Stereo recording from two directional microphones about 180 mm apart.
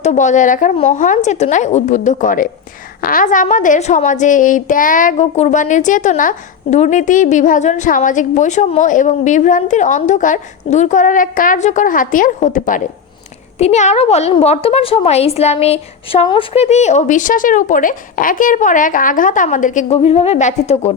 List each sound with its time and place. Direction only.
0.0 s a woman's voice: 40° left (ahead or behind)